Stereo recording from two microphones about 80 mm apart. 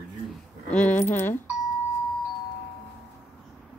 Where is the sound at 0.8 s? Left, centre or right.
Centre.